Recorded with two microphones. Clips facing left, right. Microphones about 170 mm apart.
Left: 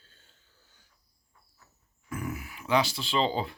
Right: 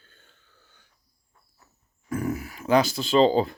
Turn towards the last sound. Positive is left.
turn(degrees=-40)  # may be behind; listen again after turning